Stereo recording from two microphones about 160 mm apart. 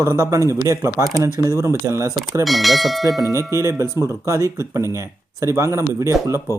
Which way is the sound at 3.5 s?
20° right (ahead or behind).